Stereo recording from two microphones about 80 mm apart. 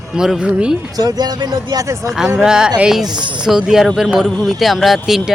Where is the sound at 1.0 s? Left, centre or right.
Right.